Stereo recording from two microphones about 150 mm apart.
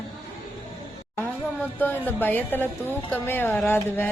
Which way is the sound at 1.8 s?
15° left (ahead or behind).